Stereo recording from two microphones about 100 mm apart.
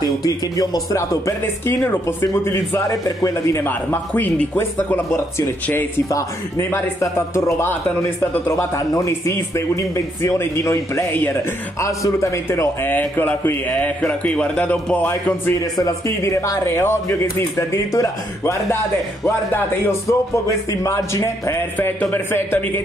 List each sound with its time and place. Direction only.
0.0 s speech: 40° left (ahead or behind)
3.6 s speech: 20° left (ahead or behind)
6.7 s a man's voice: 25° left (ahead or behind)
15.8 s speech: 30° left (ahead or behind)